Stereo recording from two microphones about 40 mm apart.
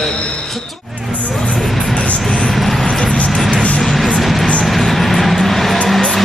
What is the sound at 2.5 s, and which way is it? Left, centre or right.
Vehicle, centre.